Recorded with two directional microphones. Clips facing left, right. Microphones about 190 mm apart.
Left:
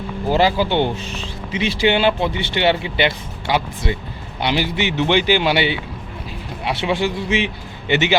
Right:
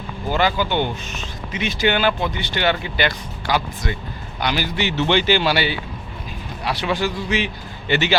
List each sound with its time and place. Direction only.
0.3 s speech: 30° left (ahead or behind)